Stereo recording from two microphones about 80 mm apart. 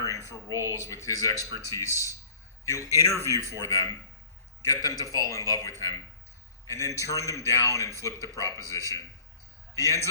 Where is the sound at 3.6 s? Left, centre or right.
Left.